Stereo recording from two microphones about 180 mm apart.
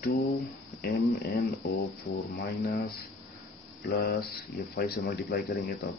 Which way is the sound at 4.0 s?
60° left (ahead or behind).